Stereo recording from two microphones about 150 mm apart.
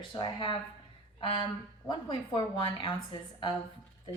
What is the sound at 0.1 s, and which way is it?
A woman's voice, 35° left (ahead or behind).